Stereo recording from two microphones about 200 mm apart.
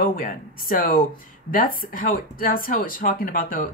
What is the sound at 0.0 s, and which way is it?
Speech, 45° left (ahead or behind).